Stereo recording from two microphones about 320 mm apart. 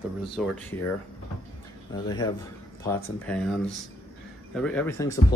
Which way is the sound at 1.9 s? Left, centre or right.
Centre.